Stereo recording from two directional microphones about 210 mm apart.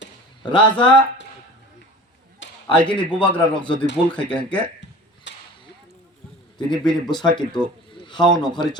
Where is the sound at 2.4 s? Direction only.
60° left (ahead or behind).